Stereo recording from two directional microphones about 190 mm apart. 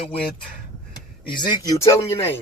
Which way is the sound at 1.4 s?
20° left (ahead or behind).